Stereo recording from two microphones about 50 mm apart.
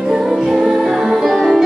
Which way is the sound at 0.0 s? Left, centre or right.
Centre.